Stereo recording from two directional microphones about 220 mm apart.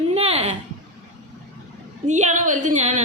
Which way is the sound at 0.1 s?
25° right (ahead or behind).